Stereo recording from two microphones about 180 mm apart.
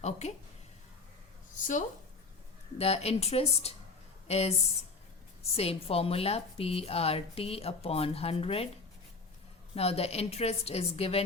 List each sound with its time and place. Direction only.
0.0 s a woman's voice: 35° left (ahead or behind)
1.5 s a woman's voice: 45° left (ahead or behind)
5.5 s a woman's voice: 35° left (ahead or behind)
9.7 s a woman's voice: 35° left (ahead or behind)